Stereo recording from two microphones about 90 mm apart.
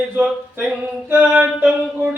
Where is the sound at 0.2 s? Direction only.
20° right (ahead or behind).